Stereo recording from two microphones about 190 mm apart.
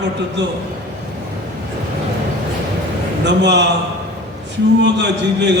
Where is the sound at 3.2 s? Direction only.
65° right (ahead or behind).